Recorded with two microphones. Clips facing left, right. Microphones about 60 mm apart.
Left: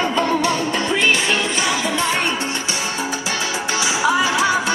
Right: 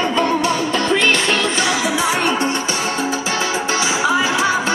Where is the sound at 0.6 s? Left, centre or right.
Centre.